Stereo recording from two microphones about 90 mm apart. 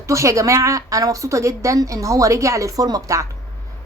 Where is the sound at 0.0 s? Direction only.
35° right (ahead or behind).